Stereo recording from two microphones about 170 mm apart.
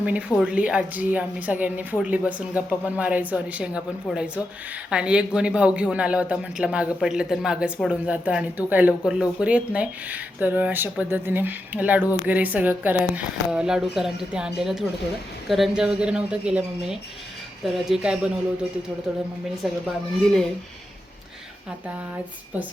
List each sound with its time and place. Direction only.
0.0 s speech: 10° right (ahead or behind)
19.6 s speech: 5° right (ahead or behind)